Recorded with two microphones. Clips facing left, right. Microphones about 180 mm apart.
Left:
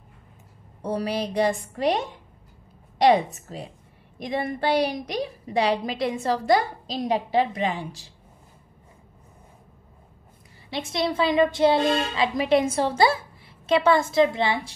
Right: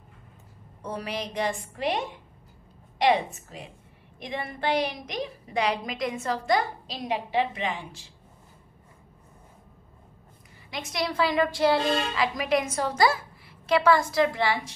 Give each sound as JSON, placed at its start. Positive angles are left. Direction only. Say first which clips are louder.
{"t": 0.8, "sound": "a woman's voice", "louder": "left 6 dB", "side_deg": 35}
{"t": 3.0, "sound": "a woman's voice", "louder": "left 4 dB", "side_deg": 40}
{"t": 10.7, "sound": "a woman's voice", "louder": "left 4 dB", "side_deg": 25}